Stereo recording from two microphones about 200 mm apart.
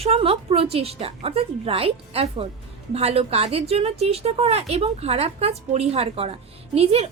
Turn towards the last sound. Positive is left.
turn(degrees=-30)  # may be behind; listen again after turning